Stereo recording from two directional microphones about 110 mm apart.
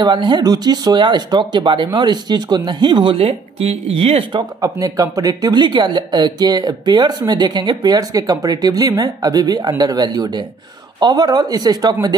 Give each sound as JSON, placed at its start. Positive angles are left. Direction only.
{"t": 0.0, "sound": "speech", "side_deg": -45}
{"t": 4.6, "sound": "speech", "side_deg": -30}